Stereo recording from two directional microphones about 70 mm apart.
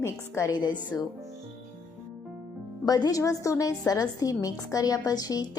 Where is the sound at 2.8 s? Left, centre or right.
Left.